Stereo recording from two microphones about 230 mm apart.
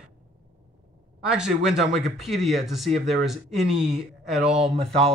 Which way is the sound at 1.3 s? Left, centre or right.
Centre.